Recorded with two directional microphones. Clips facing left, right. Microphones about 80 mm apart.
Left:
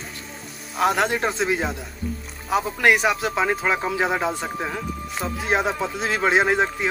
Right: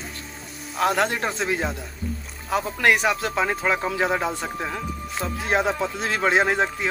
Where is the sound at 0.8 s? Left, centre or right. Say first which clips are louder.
Left 1 dB; centre.